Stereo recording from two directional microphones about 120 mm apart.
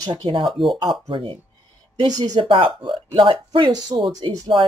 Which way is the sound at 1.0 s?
45° right (ahead or behind).